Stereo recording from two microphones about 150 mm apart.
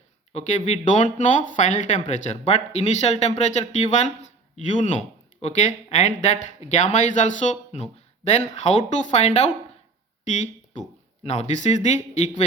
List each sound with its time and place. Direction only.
0.3 s speech: 50° left (ahead or behind)
10.8 s a man's voice: 45° left (ahead or behind)